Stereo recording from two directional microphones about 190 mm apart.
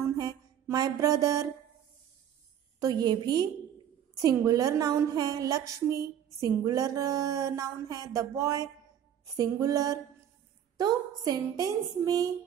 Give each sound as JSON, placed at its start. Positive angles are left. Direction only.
{"t": 0.2, "sound": "music", "side_deg": -20}
{"t": 2.8, "sound": "a woman's voice", "side_deg": -20}